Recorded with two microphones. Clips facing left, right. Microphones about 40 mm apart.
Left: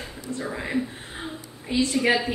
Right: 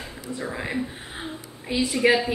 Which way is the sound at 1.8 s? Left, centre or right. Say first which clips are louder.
Right 1 dB; centre.